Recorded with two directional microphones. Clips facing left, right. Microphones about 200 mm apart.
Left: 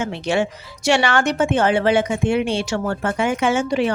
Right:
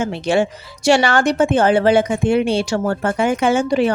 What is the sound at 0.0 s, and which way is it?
Speech, 35° right (ahead or behind).